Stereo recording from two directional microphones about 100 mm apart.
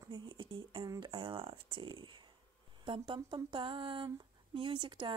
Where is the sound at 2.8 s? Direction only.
50° right (ahead or behind).